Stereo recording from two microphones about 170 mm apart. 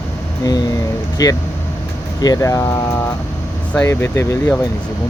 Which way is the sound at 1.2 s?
20° left (ahead or behind).